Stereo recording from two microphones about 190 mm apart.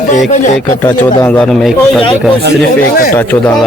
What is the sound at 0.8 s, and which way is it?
A man's voice, 10° left (ahead or behind).